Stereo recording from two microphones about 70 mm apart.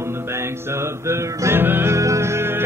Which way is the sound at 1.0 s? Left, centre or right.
Right.